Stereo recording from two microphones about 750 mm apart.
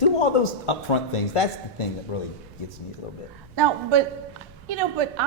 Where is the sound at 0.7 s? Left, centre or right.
Left.